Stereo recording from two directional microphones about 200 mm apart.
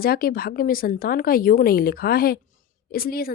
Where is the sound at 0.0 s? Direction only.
50° left (ahead or behind).